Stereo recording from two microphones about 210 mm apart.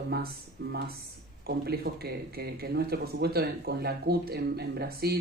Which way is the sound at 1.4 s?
50° right (ahead or behind).